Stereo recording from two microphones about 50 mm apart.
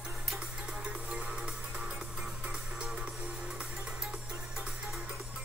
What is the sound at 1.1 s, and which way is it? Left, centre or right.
Music, right.